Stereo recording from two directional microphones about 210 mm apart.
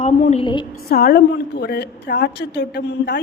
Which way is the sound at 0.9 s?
45° left (ahead or behind).